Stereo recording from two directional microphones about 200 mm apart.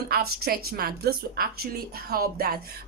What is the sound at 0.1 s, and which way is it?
A woman's voice, 50° right (ahead or behind).